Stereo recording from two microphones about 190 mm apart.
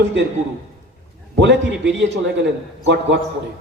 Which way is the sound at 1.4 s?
70° right (ahead or behind).